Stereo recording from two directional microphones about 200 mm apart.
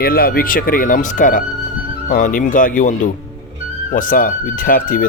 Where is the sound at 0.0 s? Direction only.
50° left (ahead or behind).